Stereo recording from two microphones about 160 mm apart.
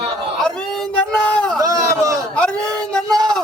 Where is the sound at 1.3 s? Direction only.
10° left (ahead or behind).